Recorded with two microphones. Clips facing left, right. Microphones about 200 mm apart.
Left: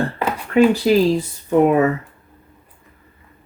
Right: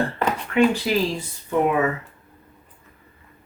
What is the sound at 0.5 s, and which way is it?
Speech, 35° left (ahead or behind).